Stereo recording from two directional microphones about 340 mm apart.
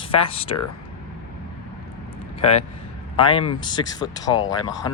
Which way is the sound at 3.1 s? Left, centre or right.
Centre.